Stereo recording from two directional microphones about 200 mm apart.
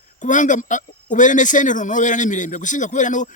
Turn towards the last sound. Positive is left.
turn(degrees=40)  # may be behind; listen again after turning